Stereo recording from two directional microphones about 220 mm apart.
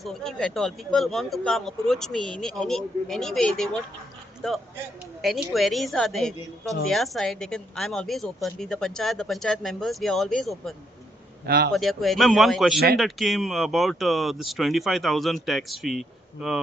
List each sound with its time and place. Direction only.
0.0 s a woman's voice: centre (ahead or behind)
5.2 s a woman's voice: centre (ahead or behind)
11.4 s a man's voice: 45° right (ahead or behind)
11.7 s a woman's voice: centre (ahead or behind)